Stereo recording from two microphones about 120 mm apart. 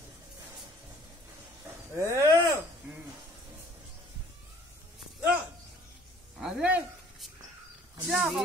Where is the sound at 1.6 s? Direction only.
25° right (ahead or behind).